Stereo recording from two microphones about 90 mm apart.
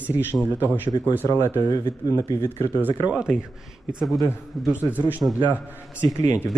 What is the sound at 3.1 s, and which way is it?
Speech, 5° right (ahead or behind).